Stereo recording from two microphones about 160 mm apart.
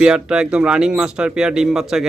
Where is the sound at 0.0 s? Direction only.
5° right (ahead or behind).